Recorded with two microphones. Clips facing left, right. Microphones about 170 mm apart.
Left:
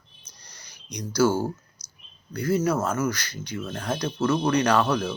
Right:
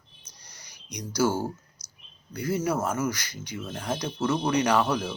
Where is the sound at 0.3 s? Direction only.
15° right (ahead or behind).